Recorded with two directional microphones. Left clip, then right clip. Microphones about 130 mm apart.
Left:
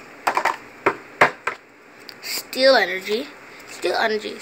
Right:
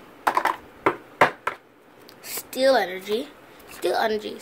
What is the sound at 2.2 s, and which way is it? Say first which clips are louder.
A woman's voice: left 4 dB; 20° right (ahead or behind).